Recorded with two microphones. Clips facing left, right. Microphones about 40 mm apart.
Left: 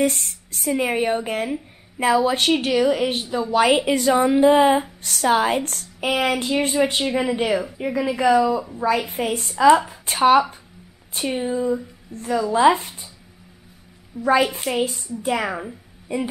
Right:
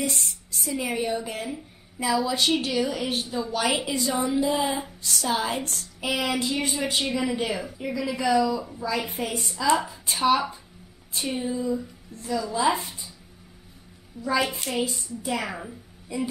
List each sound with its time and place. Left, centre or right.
0.0 s speech: left
8.7 s speech: left
14.2 s speech: left
14.6 s speech: left
15.4 s speech: centre
16.1 s speech: left